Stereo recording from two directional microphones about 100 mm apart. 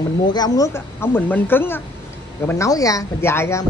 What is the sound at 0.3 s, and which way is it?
Speech, 40° left (ahead or behind).